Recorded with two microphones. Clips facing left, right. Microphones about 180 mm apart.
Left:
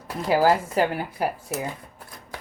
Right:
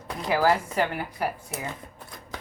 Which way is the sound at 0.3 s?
30° left (ahead or behind).